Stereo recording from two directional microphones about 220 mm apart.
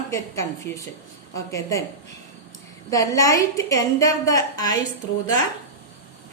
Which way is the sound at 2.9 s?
15° left (ahead or behind).